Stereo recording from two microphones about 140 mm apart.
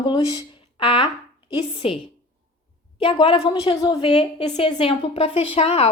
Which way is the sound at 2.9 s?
40° left (ahead or behind).